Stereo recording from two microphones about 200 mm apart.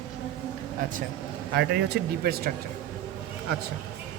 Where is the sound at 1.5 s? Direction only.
55° right (ahead or behind).